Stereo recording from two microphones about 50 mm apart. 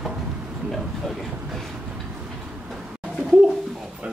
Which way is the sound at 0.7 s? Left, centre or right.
Centre.